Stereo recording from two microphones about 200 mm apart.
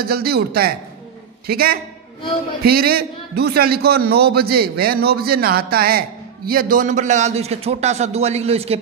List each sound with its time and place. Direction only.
0.0 s a man's voice: 50° right (ahead or behind); by 8.7 s 30° right (ahead or behind)